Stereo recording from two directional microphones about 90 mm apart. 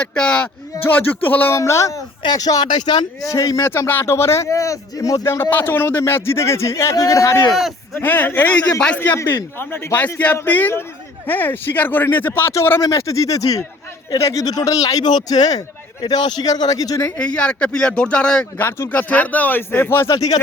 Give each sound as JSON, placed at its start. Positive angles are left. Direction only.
{"t": 0.0, "sound": "speech", "side_deg": 10}
{"t": 1.5, "sound": "speech", "side_deg": 30}
{"t": 2.2, "sound": "speech", "side_deg": 45}
{"t": 3.7, "sound": "speech", "side_deg": 25}
{"t": 7.9, "sound": "speech", "side_deg": 20}
{"t": 17.2, "sound": "speech", "side_deg": 10}
{"t": 18.6, "sound": "speech", "side_deg": 20}